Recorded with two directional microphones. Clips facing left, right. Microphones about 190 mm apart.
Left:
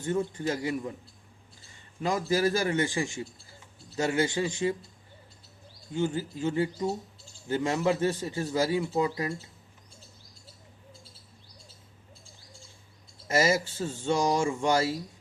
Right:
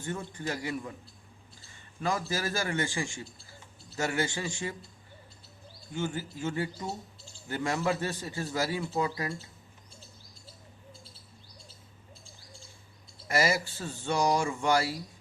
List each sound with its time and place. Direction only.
0.0 s a man's voice: 20° left (ahead or behind)
2.0 s a man's voice: 20° left (ahead or behind)
5.9 s a man's voice: 20° left (ahead or behind)
13.2 s a man's voice: 20° left (ahead or behind)